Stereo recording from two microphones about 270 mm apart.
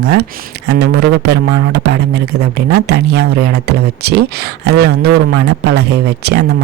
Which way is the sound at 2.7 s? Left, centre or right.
Right.